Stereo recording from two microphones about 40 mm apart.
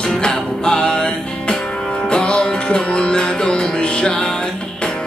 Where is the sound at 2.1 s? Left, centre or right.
Left.